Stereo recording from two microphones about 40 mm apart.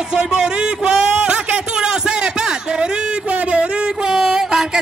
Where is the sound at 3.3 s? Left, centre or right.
Right.